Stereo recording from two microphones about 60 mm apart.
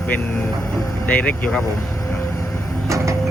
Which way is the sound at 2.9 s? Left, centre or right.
Right.